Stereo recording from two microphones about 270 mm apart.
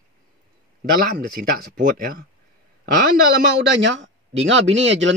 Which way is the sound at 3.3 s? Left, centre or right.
Right.